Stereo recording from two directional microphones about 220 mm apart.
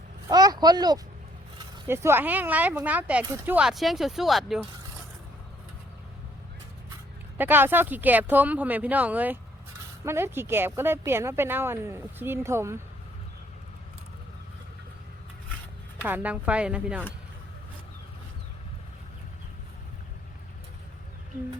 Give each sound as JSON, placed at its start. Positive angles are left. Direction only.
{"t": 0.3, "sound": "speech", "side_deg": -15}
{"t": 7.3, "sound": "speech", "side_deg": -10}
{"t": 16.0, "sound": "speech", "side_deg": -5}